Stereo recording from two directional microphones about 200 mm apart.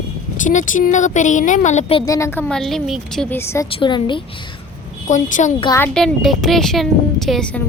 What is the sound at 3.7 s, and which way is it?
Speech, 25° left (ahead or behind).